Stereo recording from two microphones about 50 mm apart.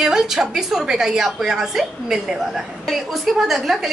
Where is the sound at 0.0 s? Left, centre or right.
Centre.